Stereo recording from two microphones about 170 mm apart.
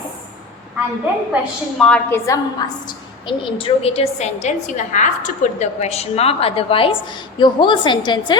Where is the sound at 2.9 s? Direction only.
30° left (ahead or behind).